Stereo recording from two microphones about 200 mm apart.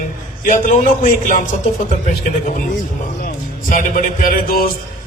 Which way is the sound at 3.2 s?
45° left (ahead or behind).